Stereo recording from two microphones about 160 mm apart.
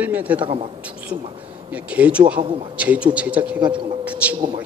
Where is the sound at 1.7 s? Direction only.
10° right (ahead or behind).